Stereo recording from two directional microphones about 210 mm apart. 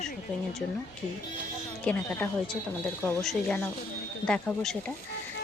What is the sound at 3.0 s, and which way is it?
A woman's voice, 10° left (ahead or behind).